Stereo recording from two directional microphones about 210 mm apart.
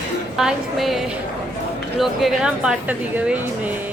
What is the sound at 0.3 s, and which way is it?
Speech, centre (ahead or behind).